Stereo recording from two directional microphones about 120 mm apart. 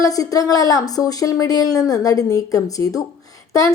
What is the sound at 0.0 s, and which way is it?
A woman's voice, 30° left (ahead or behind).